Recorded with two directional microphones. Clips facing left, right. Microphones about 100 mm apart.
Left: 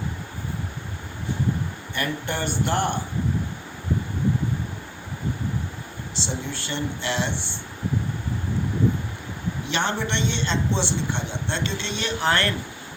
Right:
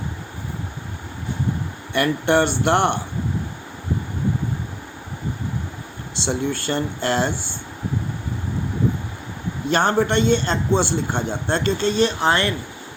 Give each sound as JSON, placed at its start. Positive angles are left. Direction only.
{"t": 1.9, "sound": "speech", "side_deg": -70}
{"t": 6.2, "sound": "a man's voice", "side_deg": -55}
{"t": 9.6, "sound": "a man's voice", "side_deg": -45}
{"t": 12.3, "sound": "speech", "side_deg": -15}